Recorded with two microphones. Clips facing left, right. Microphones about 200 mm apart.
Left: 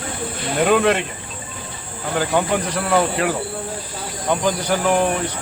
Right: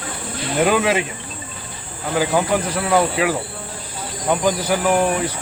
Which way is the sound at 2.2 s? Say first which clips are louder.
Right 1 dB; 5° right (ahead or behind).